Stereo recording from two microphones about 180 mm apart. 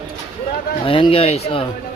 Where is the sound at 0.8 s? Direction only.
30° left (ahead or behind).